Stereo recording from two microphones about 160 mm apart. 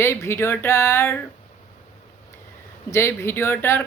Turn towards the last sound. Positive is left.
turn(degrees=15)  # may be behind; listen again after turning